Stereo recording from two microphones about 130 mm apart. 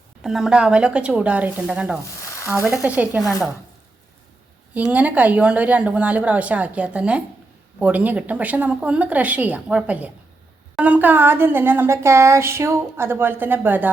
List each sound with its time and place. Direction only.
0.2 s a woman's voice: 5° right (ahead or behind)
2.2 s sizzle: 25° left (ahead or behind)
2.8 s a woman's voice: 10° right (ahead or behind)
4.7 s a woman's voice: 10° right (ahead or behind)